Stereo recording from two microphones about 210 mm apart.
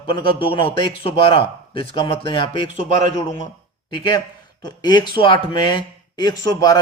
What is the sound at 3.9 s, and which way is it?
A man's voice, 20° left (ahead or behind).